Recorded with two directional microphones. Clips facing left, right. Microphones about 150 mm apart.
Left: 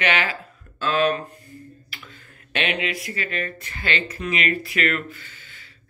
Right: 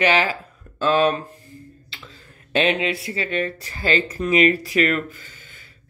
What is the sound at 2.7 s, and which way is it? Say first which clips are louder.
Speech: right 5 dB; 30° right (ahead or behind).